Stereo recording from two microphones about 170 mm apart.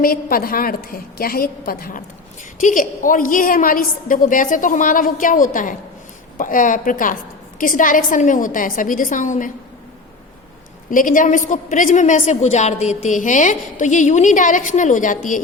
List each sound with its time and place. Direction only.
0.0 s a woman's voice: 60° left (ahead or behind)
10.9 s a woman's voice: 50° left (ahead or behind)